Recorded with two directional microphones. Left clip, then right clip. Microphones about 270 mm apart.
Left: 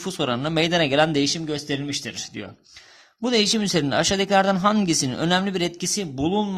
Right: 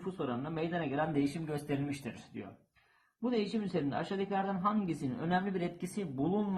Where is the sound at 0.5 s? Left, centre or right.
Left.